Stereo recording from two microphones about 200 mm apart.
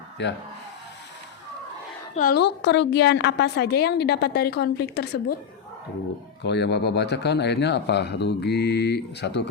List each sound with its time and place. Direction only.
0.2 s a woman's voice: 60° left (ahead or behind)
2.1 s a woman's voice: 50° left (ahead or behind)
6.4 s a woman's voice: 60° left (ahead or behind)